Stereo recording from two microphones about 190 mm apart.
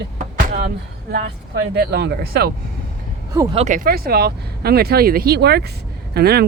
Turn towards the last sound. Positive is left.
turn(degrees=-55)  # may be behind; listen again after turning